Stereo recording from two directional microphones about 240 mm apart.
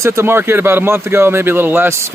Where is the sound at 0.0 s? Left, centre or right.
Centre.